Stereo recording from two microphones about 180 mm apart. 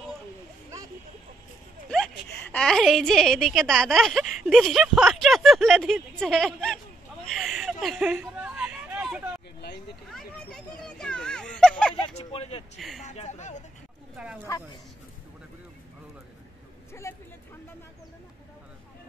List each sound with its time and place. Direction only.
2.5 s a woman's voice: 5° left (ahead or behind)
7.3 s chuckle: centre (ahead or behind)
8.2 s chatter: 5° right (ahead or behind)
10.1 s a sound: 5° left (ahead or behind)
12.2 s speech: 35° left (ahead or behind)
12.7 s a woman's voice: centre (ahead or behind)
13.0 s speech: 40° left (ahead or behind)
14.1 s speech: 5° right (ahead or behind)
17.0 s speech: 15° left (ahead or behind)